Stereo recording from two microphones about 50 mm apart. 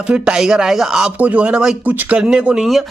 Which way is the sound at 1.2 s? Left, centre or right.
Right.